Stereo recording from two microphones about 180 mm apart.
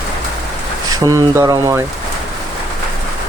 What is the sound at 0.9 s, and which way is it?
Speech, 20° right (ahead or behind).